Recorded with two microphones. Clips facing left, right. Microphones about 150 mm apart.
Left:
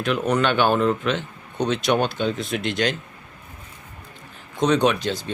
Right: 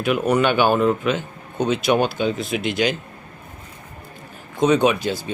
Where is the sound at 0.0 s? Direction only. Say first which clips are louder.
Right 3 dB; 10° right (ahead or behind).